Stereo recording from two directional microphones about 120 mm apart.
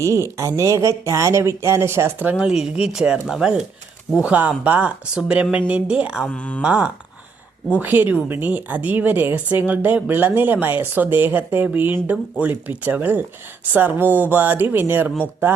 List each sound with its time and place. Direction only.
0.0 s speech: 25° right (ahead or behind)
2.4 s a woman's voice: 5° right (ahead or behind)
6.2 s speech: 10° left (ahead or behind)
6.6 s a woman's voice: 10° right (ahead or behind)